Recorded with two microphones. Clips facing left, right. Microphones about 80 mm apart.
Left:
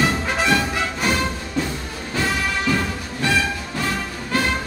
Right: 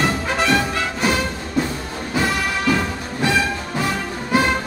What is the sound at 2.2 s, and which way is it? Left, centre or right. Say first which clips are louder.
Music: right 1 dB; centre.